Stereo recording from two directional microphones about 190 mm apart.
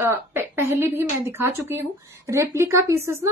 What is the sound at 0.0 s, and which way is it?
A woman's voice, 15° right (ahead or behind).